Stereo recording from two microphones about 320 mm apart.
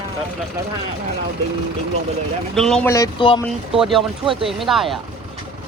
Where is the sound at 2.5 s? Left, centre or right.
Centre.